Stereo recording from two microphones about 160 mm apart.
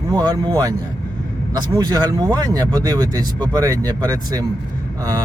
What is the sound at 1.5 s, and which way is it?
Speech, 25° right (ahead or behind).